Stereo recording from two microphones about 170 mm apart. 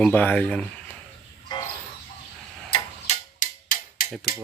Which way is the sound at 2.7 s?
45° left (ahead or behind).